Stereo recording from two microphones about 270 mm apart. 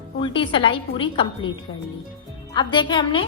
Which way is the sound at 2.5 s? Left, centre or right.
Centre.